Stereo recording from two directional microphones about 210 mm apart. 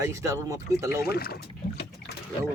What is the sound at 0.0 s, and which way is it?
Speech, 15° right (ahead or behind).